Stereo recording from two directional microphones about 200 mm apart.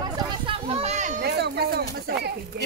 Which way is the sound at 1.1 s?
55° right (ahead or behind).